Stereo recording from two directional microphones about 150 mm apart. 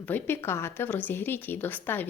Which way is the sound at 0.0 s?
15° left (ahead or behind).